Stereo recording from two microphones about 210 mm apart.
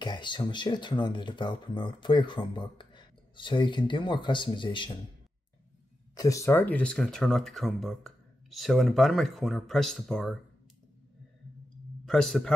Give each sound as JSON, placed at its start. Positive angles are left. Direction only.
{"t": 0.0, "sound": "speech", "side_deg": 20}
{"t": 6.1, "sound": "speech", "side_deg": 15}
{"t": 12.0, "sound": "a man's voice", "side_deg": 0}